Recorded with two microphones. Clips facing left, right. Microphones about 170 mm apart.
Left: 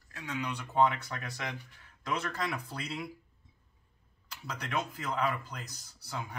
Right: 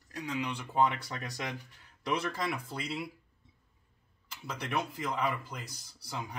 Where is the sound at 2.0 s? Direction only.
10° right (ahead or behind).